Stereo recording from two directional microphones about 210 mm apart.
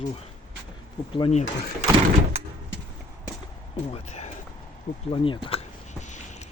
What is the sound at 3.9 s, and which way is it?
Speech, 35° left (ahead or behind).